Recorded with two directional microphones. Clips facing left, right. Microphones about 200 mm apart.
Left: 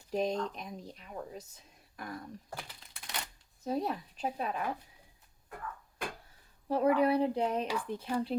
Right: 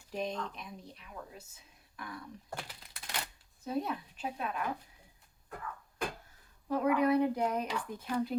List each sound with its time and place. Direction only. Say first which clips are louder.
0.1 s speech: left 5 dB; 40° left (ahead or behind)
2.6 s a sound: right 1 dB; centre (ahead or behind)
3.6 s speech: left 2 dB; 40° left (ahead or behind)
6.7 s speech: left 1 dB; 35° left (ahead or behind)